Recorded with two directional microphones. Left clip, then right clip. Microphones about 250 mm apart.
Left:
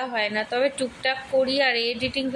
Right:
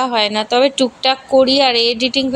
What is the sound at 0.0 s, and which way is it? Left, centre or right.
Speech, right.